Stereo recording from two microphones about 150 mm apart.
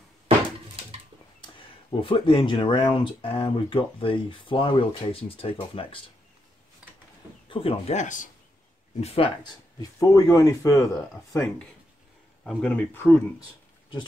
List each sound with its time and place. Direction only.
1.4 s speech: 35° left (ahead or behind)
7.4 s speech: 40° left (ahead or behind); by 8.3 s 55° left (ahead or behind)
9.0 s speech: 40° left (ahead or behind)
9.4 s speech: 25° left (ahead or behind)
11.3 s speech: 10° left (ahead or behind)